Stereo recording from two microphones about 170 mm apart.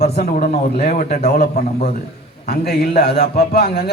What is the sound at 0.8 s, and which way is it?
Speech, 45° left (ahead or behind).